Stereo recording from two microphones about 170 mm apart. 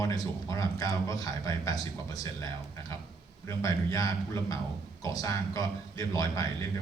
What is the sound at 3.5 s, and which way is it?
A man's voice, 20° left (ahead or behind).